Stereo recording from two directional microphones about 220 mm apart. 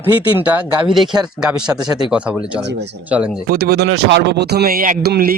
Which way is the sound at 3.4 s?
45° right (ahead or behind).